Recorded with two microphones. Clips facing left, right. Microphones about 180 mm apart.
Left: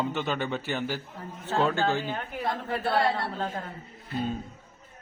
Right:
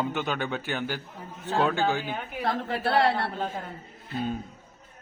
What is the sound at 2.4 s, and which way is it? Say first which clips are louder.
Speech: right 2 dB; 70° right (ahead or behind).